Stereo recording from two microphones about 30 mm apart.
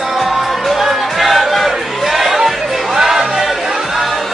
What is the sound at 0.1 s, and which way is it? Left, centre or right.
Music, right.